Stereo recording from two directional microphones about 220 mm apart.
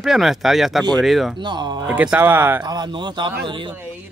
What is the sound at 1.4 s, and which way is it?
Speech, 20° right (ahead or behind).